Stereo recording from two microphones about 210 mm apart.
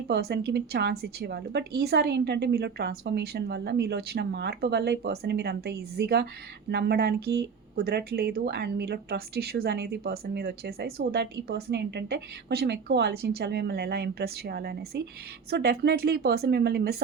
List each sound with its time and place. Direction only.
0.1 s speech: 50° right (ahead or behind)